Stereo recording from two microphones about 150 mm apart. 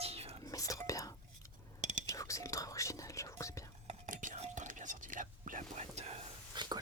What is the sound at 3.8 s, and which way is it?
Whispering, 55° right (ahead or behind).